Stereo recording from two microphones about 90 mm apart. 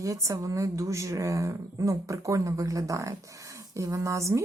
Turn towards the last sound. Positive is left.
turn(degrees=-35)  # may be behind; listen again after turning